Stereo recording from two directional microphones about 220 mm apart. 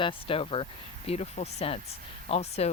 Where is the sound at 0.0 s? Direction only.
25° left (ahead or behind).